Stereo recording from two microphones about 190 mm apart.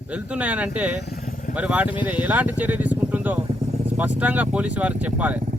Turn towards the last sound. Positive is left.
turn(degrees=-5)  # may be behind; listen again after turning